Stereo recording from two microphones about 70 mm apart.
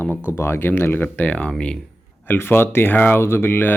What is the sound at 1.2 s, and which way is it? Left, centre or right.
Speech, centre.